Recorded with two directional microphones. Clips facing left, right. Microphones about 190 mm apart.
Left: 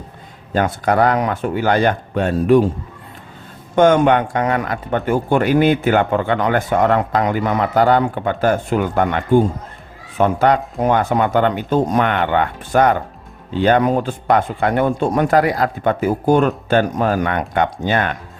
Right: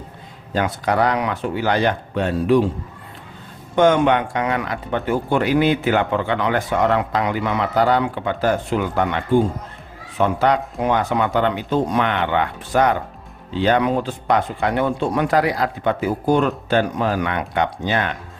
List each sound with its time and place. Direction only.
0.5 s speech: 50° left (ahead or behind)
3.8 s speech: 45° left (ahead or behind)